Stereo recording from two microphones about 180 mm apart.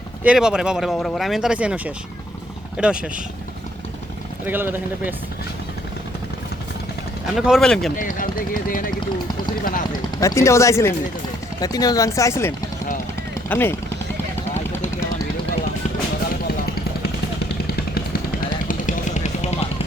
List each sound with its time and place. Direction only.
0.2 s speech: 5° right (ahead or behind)
4.4 s speech: 10° right (ahead or behind)
7.3 s speech: centre (ahead or behind)
7.9 s speech: 50° left (ahead or behind)
10.2 s speech: 15° left (ahead or behind)
17.9 s vehicle: 55° left (ahead or behind); by 19.6 s 40° left (ahead or behind)